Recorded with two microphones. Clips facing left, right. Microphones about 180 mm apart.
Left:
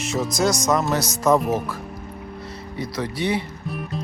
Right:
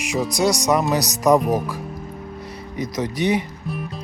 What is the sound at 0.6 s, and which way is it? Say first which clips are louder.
Speech: right 2 dB; 15° right (ahead or behind).